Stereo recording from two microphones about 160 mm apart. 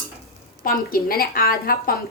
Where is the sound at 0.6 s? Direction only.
65° left (ahead or behind).